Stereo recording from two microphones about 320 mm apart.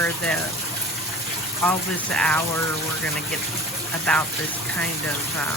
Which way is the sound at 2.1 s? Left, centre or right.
Centre.